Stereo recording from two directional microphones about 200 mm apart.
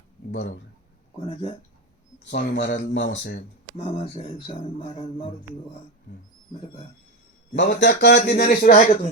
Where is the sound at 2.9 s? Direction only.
65° left (ahead or behind).